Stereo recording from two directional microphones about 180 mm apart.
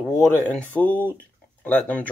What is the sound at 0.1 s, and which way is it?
Speech, 10° left (ahead or behind).